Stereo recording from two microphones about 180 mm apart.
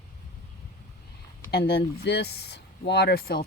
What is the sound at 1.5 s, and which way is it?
Speech, 60° left (ahead or behind).